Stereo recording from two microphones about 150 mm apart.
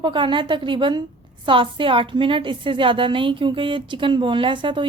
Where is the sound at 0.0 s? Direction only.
30° right (ahead or behind).